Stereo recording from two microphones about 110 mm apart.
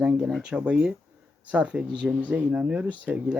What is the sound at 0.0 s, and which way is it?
Speech, 10° right (ahead or behind).